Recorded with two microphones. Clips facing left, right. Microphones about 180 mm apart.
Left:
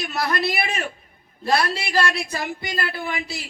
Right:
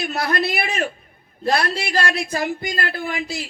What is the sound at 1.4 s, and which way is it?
A woman's voice, 55° right (ahead or behind).